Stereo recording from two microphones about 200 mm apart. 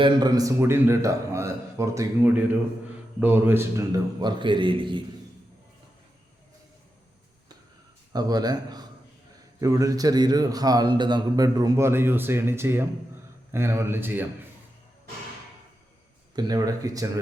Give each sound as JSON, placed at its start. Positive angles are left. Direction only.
{"t": 0.0, "sound": "a man's voice", "side_deg": -20}
{"t": 8.1, "sound": "a man's voice", "side_deg": -20}
{"t": 16.3, "sound": "a man's voice", "side_deg": -20}